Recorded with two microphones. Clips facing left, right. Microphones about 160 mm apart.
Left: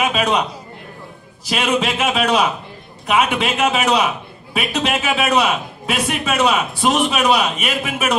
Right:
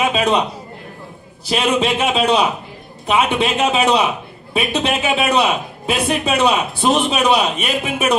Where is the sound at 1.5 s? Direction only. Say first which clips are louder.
Right 2 dB; 30° right (ahead or behind).